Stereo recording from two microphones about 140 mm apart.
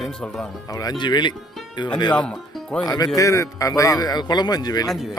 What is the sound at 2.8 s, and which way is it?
A man's voice, 25° left (ahead or behind).